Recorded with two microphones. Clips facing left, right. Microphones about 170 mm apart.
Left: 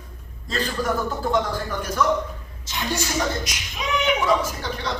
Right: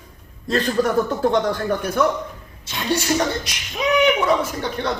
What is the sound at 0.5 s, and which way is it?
Speech, 60° right (ahead or behind).